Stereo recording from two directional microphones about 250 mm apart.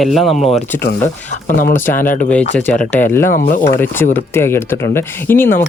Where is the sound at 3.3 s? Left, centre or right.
Left.